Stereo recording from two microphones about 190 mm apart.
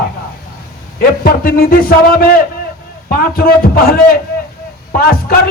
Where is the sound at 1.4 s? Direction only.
50° left (ahead or behind).